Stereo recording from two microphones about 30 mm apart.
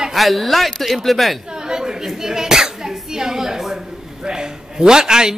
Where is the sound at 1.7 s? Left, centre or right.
Right.